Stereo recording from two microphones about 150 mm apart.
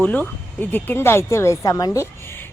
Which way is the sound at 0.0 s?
10° left (ahead or behind).